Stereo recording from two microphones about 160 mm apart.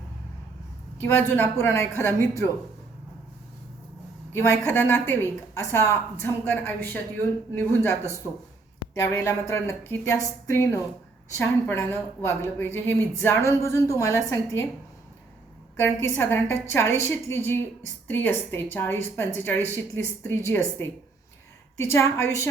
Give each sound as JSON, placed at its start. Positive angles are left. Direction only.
{"t": 1.0, "sound": "speech", "side_deg": 15}
{"t": 4.3, "sound": "a woman's voice", "side_deg": 15}
{"t": 9.0, "sound": "speech", "side_deg": 15}
{"t": 15.7, "sound": "speech", "side_deg": 15}